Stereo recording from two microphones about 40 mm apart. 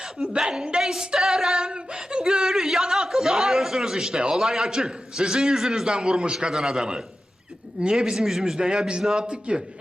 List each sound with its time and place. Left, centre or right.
0.0 s a sound: centre
4.4 s a man's voice: centre
7.8 s a woman's voice: right
8.1 s a man's voice: centre; by 9.6 s right